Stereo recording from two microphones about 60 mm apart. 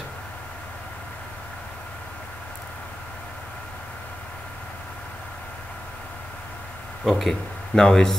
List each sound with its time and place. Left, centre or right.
7.1 s speech: centre